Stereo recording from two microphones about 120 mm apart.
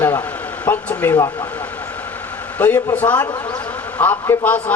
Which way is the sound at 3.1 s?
35° left (ahead or behind).